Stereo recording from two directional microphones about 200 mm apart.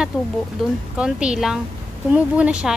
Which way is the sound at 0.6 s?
Centre (ahead or behind).